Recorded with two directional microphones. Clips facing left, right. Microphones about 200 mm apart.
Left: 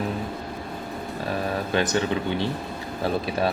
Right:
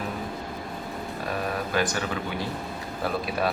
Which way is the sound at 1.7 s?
25° left (ahead or behind).